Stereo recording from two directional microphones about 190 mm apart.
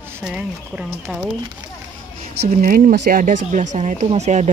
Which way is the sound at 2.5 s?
45° right (ahead or behind).